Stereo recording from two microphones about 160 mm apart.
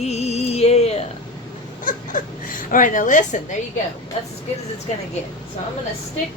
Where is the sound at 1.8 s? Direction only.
60° left (ahead or behind).